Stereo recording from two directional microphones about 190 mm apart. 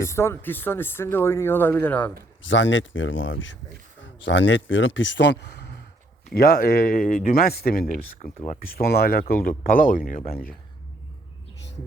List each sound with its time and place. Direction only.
0.0 s speech: 15° left (ahead or behind)
2.4 s speech: 80° left; by 10.5 s 50° left (ahead or behind)